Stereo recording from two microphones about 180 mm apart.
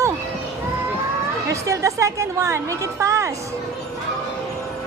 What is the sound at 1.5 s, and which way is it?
A woman's voice, 15° right (ahead or behind).